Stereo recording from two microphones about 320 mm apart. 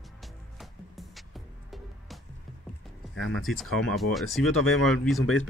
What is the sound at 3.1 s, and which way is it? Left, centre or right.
Speech, centre.